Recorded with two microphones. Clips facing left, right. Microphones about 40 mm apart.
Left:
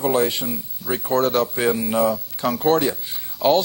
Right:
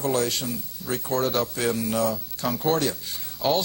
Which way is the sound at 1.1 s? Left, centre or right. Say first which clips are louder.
Left 6 dB; centre.